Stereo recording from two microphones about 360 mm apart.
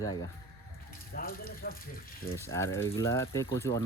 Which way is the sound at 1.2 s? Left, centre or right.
Left.